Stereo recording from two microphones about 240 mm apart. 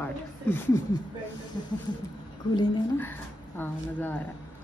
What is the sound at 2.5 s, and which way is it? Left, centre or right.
Speech, centre.